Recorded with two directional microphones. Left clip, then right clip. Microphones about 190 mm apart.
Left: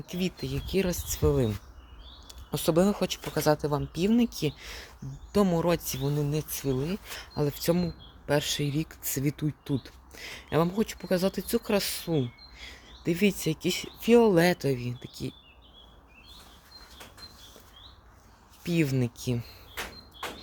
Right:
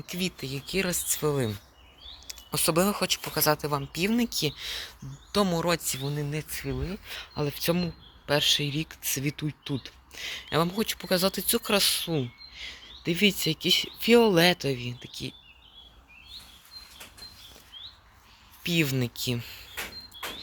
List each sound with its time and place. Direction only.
0.0 s speech: 15° left (ahead or behind)
5.3 s speech: 20° left (ahead or behind)
7.1 s speech: 10° left (ahead or behind)
14.3 s speech: 10° left (ahead or behind)
18.6 s speech: 10° left (ahead or behind)
20.2 s a sound: 25° right (ahead or behind)